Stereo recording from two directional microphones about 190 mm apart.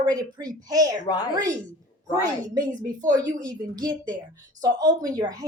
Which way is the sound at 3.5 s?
20° right (ahead or behind).